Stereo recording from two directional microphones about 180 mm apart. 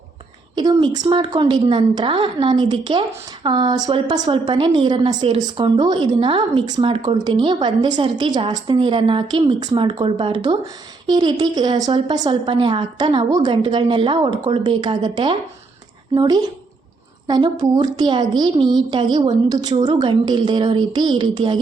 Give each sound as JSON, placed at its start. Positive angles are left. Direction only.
{"t": 0.5, "sound": "a woman's voice", "side_deg": -25}